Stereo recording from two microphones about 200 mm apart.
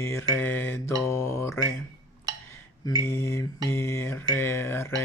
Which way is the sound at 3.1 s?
15° left (ahead or behind).